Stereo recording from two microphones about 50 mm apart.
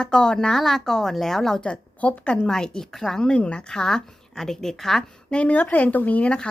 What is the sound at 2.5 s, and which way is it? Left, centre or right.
Speech, centre.